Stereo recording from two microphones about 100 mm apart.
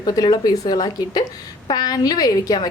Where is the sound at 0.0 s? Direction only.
40° left (ahead or behind).